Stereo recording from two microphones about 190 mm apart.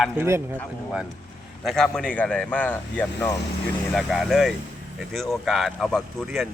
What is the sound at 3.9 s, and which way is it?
Speech, centre (ahead or behind).